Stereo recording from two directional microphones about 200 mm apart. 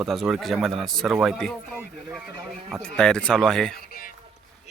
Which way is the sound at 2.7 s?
Centre (ahead or behind).